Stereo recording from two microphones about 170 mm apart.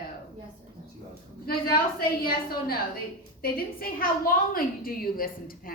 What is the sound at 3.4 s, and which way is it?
A woman's voice, 60° left (ahead or behind).